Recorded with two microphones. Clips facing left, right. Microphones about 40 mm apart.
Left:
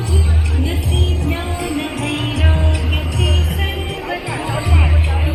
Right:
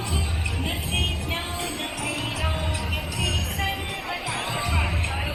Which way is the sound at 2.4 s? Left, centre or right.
Left.